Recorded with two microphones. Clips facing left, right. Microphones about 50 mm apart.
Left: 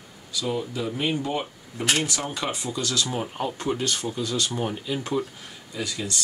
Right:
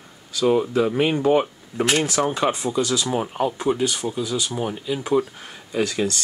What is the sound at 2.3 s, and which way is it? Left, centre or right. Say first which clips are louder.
Speech: right 8 dB; right.